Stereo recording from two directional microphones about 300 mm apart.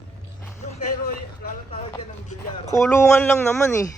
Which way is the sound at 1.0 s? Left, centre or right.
Left.